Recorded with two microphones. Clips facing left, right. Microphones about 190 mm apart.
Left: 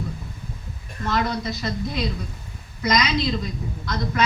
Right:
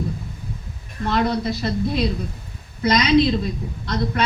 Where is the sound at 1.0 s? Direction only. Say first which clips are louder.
Right 4 dB; 30° right (ahead or behind).